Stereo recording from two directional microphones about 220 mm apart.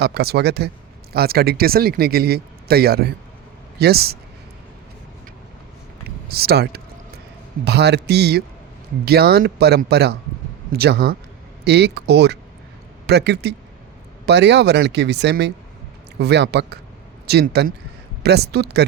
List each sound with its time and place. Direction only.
0.0 s speech: 45° right (ahead or behind)
6.2 s speech: 45° right (ahead or behind)